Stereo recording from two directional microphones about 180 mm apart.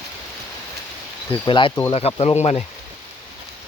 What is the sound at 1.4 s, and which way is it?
Speech, 25° left (ahead or behind).